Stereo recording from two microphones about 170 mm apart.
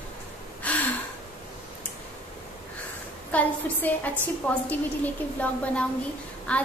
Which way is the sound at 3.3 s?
10° left (ahead or behind).